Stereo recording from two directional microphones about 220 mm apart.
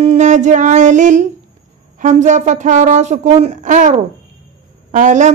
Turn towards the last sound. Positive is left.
turn(degrees=-35)  # may be behind; listen again after turning